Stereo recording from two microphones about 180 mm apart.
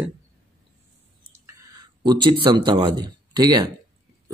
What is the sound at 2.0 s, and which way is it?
A man's voice, 25° right (ahead or behind).